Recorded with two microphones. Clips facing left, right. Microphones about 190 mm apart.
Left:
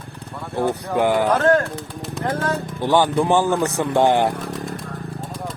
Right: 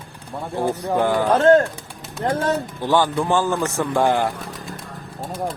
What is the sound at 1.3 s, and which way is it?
Speech, 25° right (ahead or behind).